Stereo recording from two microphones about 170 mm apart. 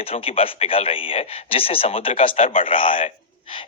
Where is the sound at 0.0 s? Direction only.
35° left (ahead or behind).